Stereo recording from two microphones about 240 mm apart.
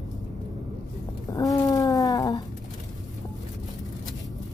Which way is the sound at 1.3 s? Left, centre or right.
Centre.